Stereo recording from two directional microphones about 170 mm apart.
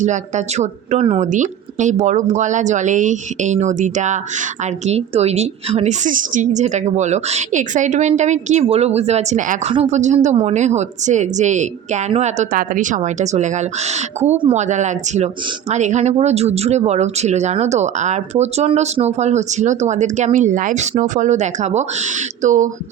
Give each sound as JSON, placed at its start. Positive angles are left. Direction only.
{"t": 0.0, "sound": "speech", "side_deg": -45}
{"t": 1.3, "sound": "speech", "side_deg": -45}